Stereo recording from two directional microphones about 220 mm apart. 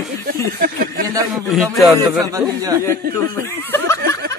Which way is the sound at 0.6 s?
40° right (ahead or behind).